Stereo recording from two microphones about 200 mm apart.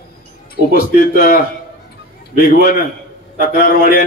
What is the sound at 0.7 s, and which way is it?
Speech, 45° left (ahead or behind).